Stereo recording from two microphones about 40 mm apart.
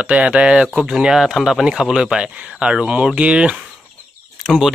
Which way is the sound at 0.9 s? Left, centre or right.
Centre.